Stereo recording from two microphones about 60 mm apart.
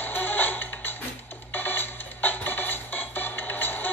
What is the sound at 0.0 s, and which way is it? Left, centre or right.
Music, left.